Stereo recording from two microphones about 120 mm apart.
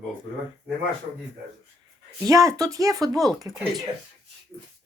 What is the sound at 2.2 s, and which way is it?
Speech, 25° right (ahead or behind).